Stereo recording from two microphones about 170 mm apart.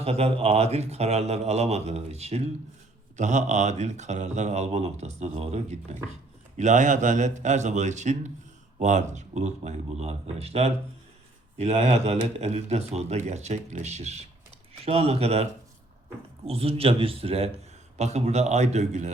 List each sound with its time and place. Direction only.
0.0 s speech: 35° right (ahead or behind)
16.5 s speech: 35° right (ahead or behind)